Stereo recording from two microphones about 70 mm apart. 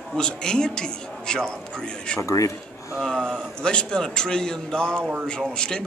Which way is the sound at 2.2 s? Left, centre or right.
Left.